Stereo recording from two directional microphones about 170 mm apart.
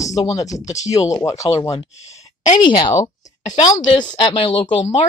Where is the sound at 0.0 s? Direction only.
20° left (ahead or behind).